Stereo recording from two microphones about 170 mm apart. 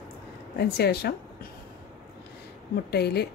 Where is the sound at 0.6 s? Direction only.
70° left (ahead or behind).